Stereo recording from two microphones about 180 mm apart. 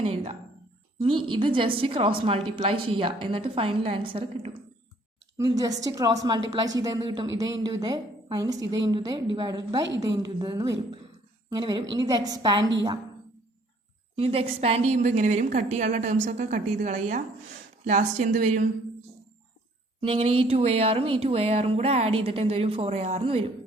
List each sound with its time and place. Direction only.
0.0 s a woman's voice: 35° right (ahead or behind)
14.2 s speech: 35° right (ahead or behind)
20.0 s speech: 30° right (ahead or behind)